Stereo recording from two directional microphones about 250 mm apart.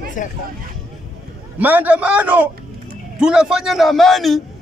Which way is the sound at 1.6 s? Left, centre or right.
Centre.